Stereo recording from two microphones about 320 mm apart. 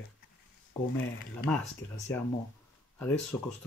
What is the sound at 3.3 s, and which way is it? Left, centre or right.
Speech, centre.